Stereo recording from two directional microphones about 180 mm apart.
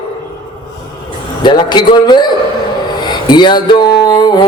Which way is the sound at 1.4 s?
25° left (ahead or behind).